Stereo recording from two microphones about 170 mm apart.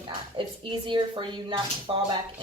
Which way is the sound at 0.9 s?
30° right (ahead or behind).